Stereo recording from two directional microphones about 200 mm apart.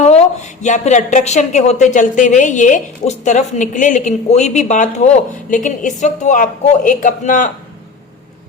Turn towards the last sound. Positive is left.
turn(degrees=40)  # may be behind; listen again after turning